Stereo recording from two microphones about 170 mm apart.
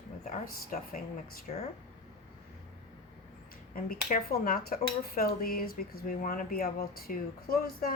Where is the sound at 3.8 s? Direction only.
60° left (ahead or behind).